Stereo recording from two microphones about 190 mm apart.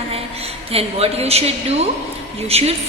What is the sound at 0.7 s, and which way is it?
A woman's voice, 30° right (ahead or behind).